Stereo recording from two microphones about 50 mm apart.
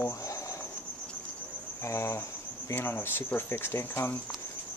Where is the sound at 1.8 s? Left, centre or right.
Left.